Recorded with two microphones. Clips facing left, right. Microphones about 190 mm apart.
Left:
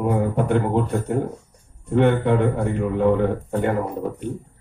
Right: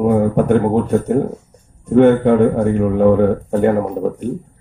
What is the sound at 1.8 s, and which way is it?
Speech, 45° right (ahead or behind).